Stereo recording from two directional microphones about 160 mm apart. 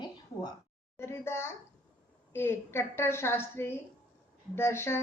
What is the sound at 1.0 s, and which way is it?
A woman's voice, 15° left (ahead or behind).